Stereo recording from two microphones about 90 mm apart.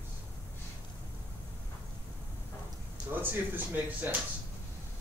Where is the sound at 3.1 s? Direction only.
20° right (ahead or behind).